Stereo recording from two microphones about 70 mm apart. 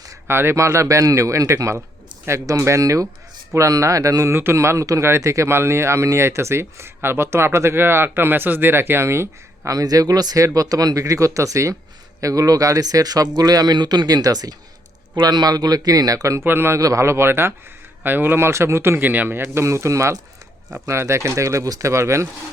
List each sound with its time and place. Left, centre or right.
0.3 s speech: right
9.7 s speech: right
15.1 s speech: right
16.4 s speech: right
16.8 s speech: right
19.4 s speech: right